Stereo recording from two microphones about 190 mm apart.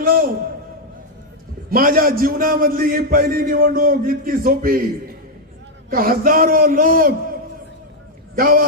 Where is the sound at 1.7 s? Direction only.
50° right (ahead or behind).